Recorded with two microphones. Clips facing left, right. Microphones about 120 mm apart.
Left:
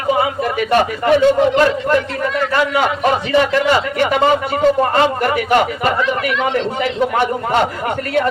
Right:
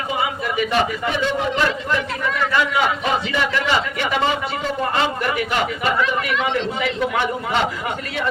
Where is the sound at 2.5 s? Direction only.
45° left (ahead or behind).